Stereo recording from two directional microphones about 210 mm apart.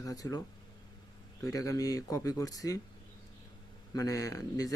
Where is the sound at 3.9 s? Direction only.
15° left (ahead or behind).